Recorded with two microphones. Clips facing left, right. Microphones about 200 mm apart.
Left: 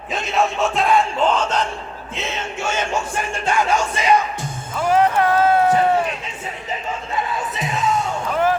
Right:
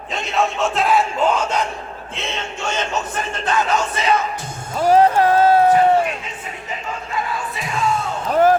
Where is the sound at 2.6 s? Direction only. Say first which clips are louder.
Left 1 dB; 10° left (ahead or behind).